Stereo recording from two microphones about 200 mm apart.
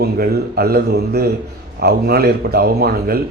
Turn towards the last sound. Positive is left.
turn(degrees=-50)  # may be behind; listen again after turning